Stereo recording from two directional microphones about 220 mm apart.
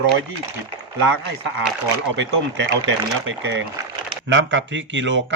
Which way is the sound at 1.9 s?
55° right (ahead or behind).